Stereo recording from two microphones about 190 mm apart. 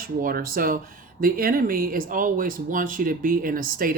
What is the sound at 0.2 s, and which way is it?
Speech, 50° right (ahead or behind).